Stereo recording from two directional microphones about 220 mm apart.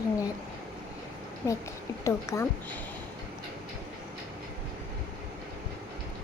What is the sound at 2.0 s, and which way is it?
Speech, 15° left (ahead or behind).